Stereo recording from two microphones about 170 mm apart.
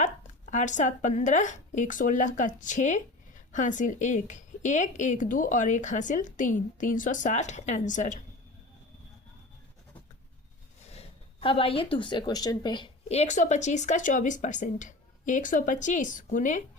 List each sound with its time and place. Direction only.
0.5 s speech: 45° left (ahead or behind)
10.9 s speech: 35° left (ahead or behind)